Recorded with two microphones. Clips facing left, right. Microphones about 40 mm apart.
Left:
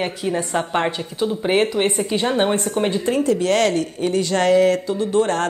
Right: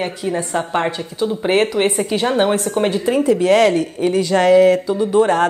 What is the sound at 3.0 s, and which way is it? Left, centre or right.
Speech, centre.